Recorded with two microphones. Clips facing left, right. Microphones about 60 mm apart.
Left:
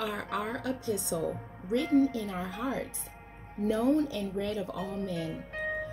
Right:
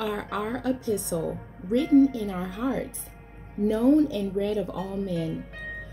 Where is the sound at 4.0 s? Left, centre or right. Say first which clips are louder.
Right 7 dB; right.